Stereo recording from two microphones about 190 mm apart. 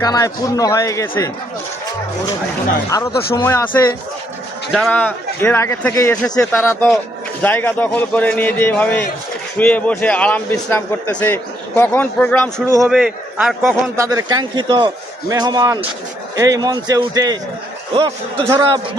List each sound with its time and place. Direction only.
0.0 s a man's voice: 20° left (ahead or behind)
2.9 s a man's voice: 15° left (ahead or behind)
12.8 s a man's voice: 5° right (ahead or behind)
13.9 s speech: 15° right (ahead or behind)